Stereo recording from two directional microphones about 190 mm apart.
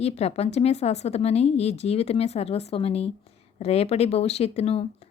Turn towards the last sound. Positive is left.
turn(degrees=30)  # may be behind; listen again after turning